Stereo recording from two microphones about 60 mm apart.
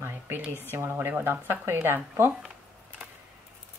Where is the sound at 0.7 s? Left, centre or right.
Right.